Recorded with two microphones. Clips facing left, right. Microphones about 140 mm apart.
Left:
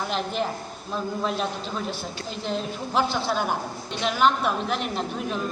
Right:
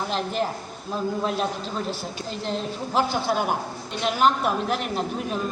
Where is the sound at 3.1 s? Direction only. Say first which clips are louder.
Right 2 dB; 45° right (ahead or behind).